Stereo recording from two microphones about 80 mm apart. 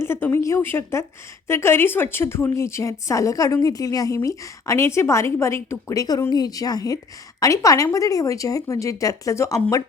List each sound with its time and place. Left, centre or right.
0.0 s a woman's voice: left